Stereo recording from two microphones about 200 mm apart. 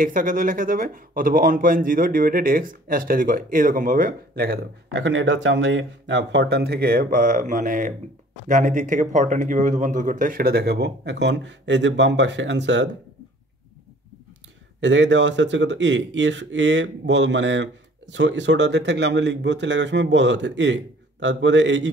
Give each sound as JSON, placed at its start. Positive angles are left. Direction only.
{"t": 0.0, "sound": "speech", "side_deg": -40}
{"t": 14.8, "sound": "speech", "side_deg": -65}